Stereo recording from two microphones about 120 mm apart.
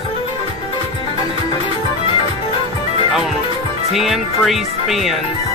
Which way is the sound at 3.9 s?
Centre (ahead or behind).